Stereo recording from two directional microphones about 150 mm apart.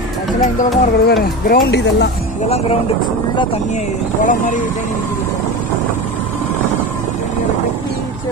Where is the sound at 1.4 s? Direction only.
90° left.